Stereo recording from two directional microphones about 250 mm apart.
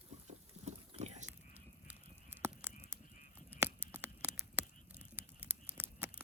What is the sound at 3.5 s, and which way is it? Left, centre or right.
Patter, centre.